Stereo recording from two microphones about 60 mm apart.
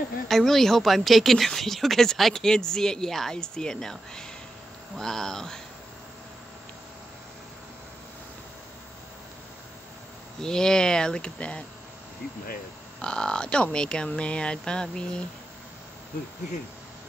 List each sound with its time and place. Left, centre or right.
0.3 s a woman's voice: centre
10.4 s speech: centre
13.0 s speech: centre